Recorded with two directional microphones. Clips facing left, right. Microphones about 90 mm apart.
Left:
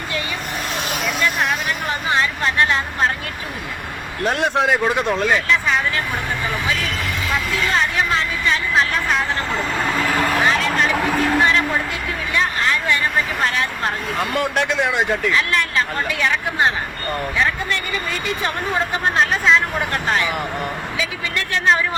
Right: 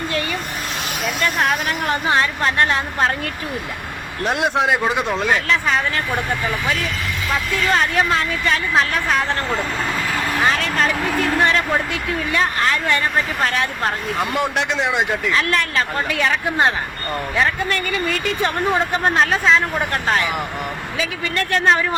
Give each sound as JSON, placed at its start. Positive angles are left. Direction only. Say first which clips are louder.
{"t": 4.4, "sound": "a man's voice", "louder": "even", "side_deg": -5}
{"t": 14.2, "sound": "a man's voice", "louder": "left 1 dB", "side_deg": -15}
{"t": 19.2, "sound": "speech", "louder": "left 1 dB", "side_deg": -35}